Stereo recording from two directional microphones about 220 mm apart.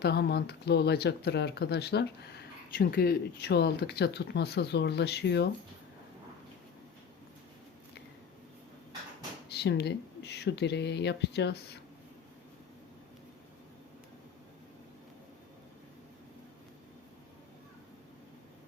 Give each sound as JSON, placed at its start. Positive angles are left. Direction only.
{"t": 0.0, "sound": "speech", "side_deg": 50}
{"t": 9.5, "sound": "speech", "side_deg": 50}